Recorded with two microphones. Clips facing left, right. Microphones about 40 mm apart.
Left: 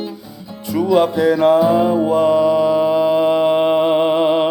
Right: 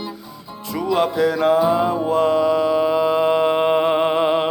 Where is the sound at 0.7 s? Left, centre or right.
Centre.